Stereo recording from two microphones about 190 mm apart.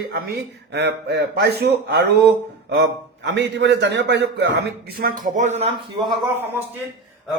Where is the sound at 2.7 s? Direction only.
65° right (ahead or behind); by 5.7 s 35° right (ahead or behind).